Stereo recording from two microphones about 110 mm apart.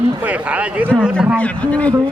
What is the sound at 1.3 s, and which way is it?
Speech, 10° left (ahead or behind).